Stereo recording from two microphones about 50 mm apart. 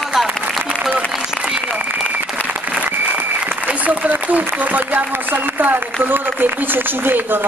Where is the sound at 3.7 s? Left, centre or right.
Right.